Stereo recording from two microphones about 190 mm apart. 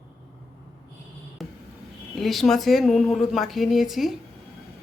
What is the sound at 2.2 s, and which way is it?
A woman's voice, centre (ahead or behind).